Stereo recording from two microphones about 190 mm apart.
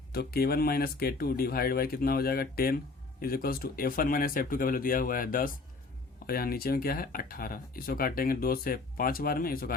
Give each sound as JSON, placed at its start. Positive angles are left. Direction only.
{"t": 0.1, "sound": "speech", "side_deg": 55}